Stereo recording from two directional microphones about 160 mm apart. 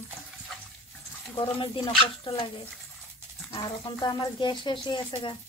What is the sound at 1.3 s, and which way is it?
Speech, 30° left (ahead or behind).